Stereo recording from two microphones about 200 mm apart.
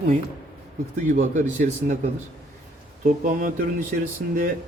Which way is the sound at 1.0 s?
40° right (ahead or behind).